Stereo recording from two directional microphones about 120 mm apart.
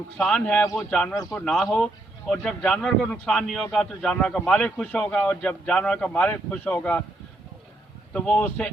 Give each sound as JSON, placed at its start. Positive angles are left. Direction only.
{"t": 0.2, "sound": "a man's voice", "side_deg": 5}
{"t": 1.1, "sound": "speech", "side_deg": 30}
{"t": 1.4, "sound": "a man's voice", "side_deg": 5}
{"t": 8.1, "sound": "a man's voice", "side_deg": 10}